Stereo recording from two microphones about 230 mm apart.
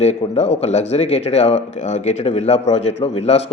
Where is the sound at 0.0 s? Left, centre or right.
Left.